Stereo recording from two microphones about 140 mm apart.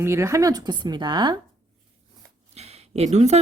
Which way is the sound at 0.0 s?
20° right (ahead or behind).